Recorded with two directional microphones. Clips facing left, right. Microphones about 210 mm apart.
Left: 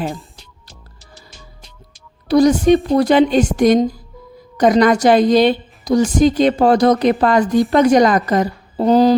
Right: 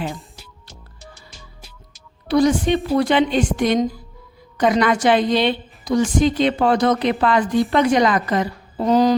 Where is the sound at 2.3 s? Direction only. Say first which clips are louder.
Left 5 dB; 40° left (ahead or behind).